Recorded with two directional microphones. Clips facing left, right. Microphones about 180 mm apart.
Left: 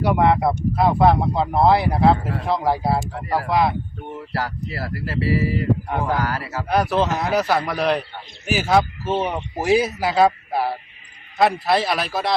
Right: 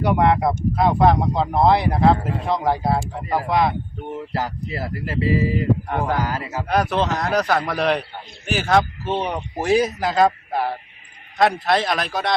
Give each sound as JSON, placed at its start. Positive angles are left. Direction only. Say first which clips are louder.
{"t": 0.0, "sound": "speech", "louder": "even", "side_deg": 5}
{"t": 3.0, "sound": "speech", "louder": "even", "side_deg": -20}
{"t": 3.5, "sound": "speech", "louder": "even", "side_deg": 0}
{"t": 4.3, "sound": "speech", "louder": "left 2 dB", "side_deg": -20}
{"t": 5.9, "sound": "speech", "louder": "even", "side_deg": 5}
{"t": 6.1, "sound": "speech", "louder": "even", "side_deg": -20}
{"t": 6.7, "sound": "a man's voice", "louder": "left 1 dB", "side_deg": 0}